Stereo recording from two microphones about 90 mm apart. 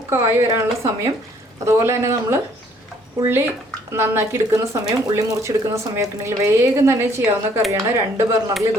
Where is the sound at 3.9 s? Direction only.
30° right (ahead or behind).